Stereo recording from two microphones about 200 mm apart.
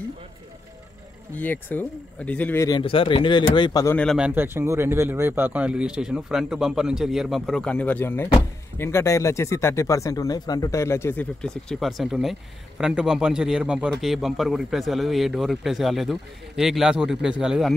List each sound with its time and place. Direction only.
1.4 s speech: 10° left (ahead or behind)
2.8 s speech: 25° left (ahead or behind); by 4.3 s 5° left (ahead or behind)
4.3 s speech: 10° right (ahead or behind)